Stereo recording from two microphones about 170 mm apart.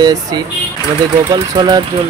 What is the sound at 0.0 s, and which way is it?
Speech, 20° right (ahead or behind).